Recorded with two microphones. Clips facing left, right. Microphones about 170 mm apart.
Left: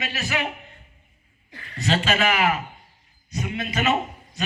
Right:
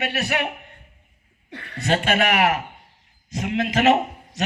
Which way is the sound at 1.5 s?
70° right (ahead or behind).